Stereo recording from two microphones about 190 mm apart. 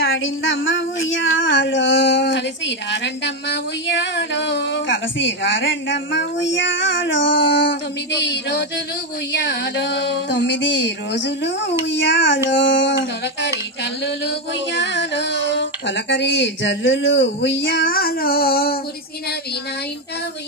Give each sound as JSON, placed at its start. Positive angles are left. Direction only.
{"t": 0.0, "sound": "a woman's voice", "side_deg": 90}
{"t": 8.3, "sound": "music", "side_deg": 65}
{"t": 9.3, "sound": "a woman's voice", "side_deg": 65}
{"t": 14.0, "sound": "a woman's voice", "side_deg": 65}
{"t": 17.8, "sound": "music", "side_deg": 50}